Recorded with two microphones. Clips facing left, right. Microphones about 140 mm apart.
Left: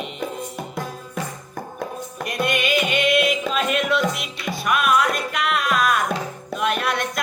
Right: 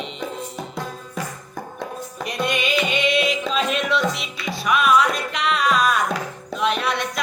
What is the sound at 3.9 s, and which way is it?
Music, 55° left (ahead or behind).